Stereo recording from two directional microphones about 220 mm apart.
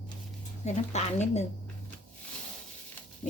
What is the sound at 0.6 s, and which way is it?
Speech, 30° left (ahead or behind).